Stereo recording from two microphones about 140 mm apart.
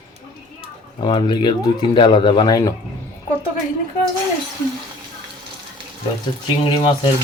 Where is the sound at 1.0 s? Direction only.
35° left (ahead or behind).